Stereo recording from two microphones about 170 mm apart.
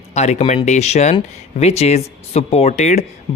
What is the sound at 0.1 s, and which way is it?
Speech, 40° left (ahead or behind).